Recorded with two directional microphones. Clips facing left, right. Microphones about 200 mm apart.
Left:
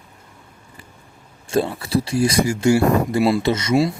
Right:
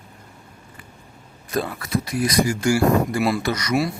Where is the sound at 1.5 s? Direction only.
30° left (ahead or behind).